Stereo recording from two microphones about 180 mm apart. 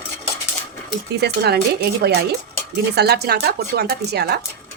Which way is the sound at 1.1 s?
65° right (ahead or behind).